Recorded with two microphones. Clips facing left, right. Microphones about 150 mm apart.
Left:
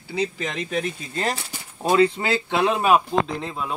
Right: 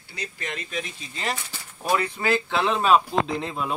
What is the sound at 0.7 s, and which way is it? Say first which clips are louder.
Speech: left 7 dB; 45° left (ahead or behind).